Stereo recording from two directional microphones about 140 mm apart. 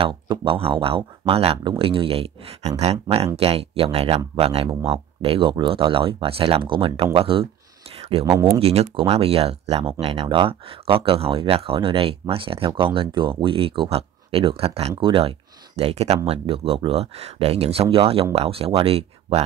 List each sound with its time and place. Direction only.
0.3 s speech: 35° right (ahead or behind)
8.3 s speech: 20° right (ahead or behind)
8.5 s speech: 45° right (ahead or behind)